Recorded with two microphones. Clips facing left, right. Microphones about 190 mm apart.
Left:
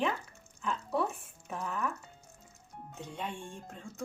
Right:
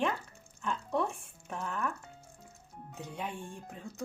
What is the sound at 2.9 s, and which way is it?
Speech, 5° right (ahead or behind).